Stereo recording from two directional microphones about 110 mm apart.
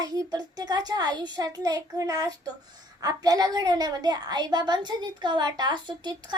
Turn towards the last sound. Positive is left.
turn(degrees=-40)  # may be behind; listen again after turning